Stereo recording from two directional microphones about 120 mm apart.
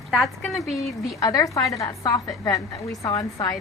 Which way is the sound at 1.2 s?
30° left (ahead or behind).